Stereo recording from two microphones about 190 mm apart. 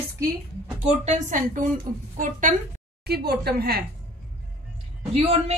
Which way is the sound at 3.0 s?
55° right (ahead or behind).